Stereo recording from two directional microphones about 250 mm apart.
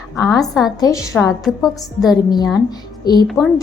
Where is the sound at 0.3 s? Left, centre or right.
Centre.